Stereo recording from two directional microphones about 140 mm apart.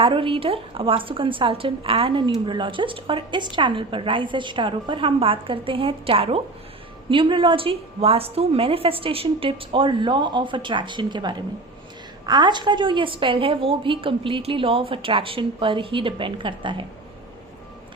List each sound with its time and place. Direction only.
0.0 s a woman's voice: 40° right (ahead or behind)